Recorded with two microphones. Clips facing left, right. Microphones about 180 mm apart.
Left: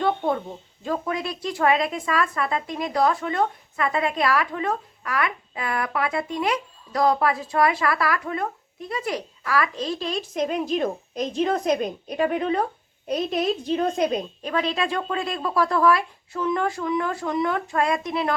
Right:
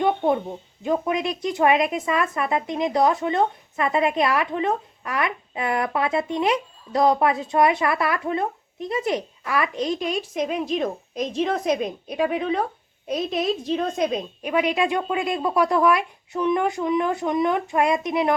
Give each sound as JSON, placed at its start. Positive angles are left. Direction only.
{"t": 0.0, "sound": "a sound", "side_deg": -20}
{"t": 0.8, "sound": "speech", "side_deg": -20}
{"t": 10.3, "sound": "a woman's voice", "side_deg": 0}
{"t": 14.4, "sound": "speech", "side_deg": -15}